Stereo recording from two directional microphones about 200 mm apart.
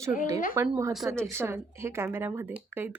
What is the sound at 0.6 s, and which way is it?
Speech, 15° right (ahead or behind).